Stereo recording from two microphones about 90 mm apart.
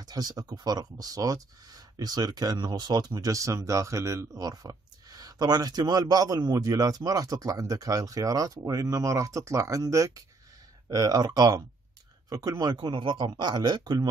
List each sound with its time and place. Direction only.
0.0 s speech: 45° right (ahead or behind)